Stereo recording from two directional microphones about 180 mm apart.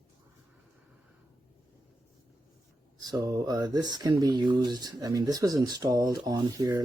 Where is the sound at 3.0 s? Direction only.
20° right (ahead or behind).